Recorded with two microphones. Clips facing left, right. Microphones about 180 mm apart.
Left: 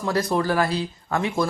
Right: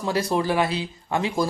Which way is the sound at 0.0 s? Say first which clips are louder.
Left 1 dB; 25° right (ahead or behind).